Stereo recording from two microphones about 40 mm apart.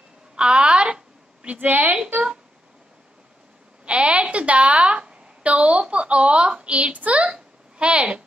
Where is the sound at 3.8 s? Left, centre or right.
Right.